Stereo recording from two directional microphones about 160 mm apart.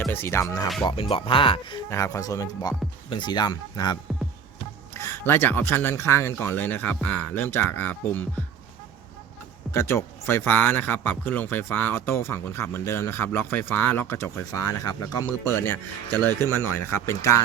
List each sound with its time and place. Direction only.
0.0 s speech: 15° left (ahead or behind)
0.9 s speech: 35° left (ahead or behind)
1.9 s speech: 20° left (ahead or behind)
4.9 s speech: 15° left (ahead or behind)
9.7 s speech: 15° left (ahead or behind)